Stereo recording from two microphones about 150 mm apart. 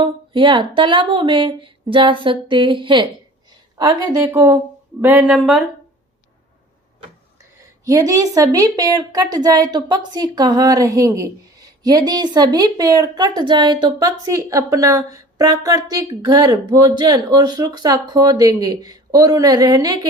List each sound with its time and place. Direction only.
0.0 s a woman's voice: 35° right (ahead or behind)
5.0 s speech: 10° right (ahead or behind)
7.9 s speech: 20° right (ahead or behind)